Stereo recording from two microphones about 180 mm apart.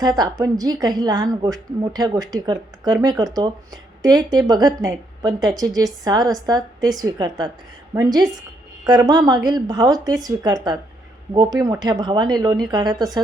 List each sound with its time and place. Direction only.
0.0 s a woman's voice: 20° right (ahead or behind)